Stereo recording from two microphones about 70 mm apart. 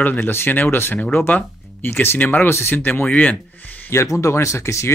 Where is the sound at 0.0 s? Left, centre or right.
Left.